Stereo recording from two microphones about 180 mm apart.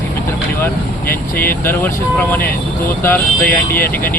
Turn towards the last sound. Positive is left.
turn(degrees=10)  # may be behind; listen again after turning